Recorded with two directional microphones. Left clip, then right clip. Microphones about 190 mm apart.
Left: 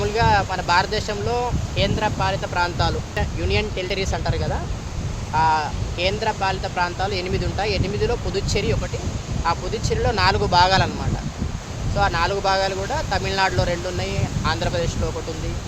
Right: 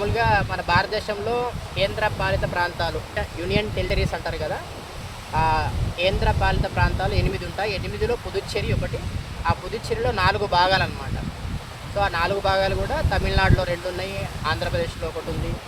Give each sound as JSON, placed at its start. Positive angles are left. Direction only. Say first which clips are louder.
{"t": 0.0, "sound": "speech", "louder": "left 2 dB", "side_deg": 25}
{"t": 5.4, "sound": "speech", "louder": "left 3 dB", "side_deg": 25}
{"t": 11.9, "sound": "speech", "louder": "left 2 dB", "side_deg": 20}